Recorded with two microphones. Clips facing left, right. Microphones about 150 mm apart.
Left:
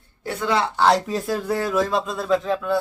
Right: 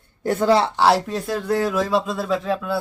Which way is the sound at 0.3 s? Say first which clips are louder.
Right 5 dB; 40° right (ahead or behind).